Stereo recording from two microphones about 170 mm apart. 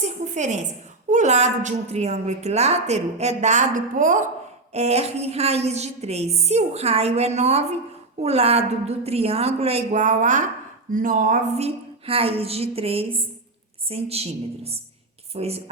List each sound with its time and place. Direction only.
0.0 s a sound: 45° right (ahead or behind)
1.1 s a woman's voice: 45° right (ahead or behind)
4.7 s a woman's voice: 40° right (ahead or behind)
11.6 s a woman's voice: 35° right (ahead or behind)